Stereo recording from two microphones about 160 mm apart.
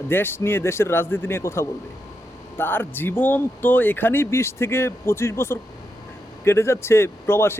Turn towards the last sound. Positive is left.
turn(degrees=15)  # may be behind; listen again after turning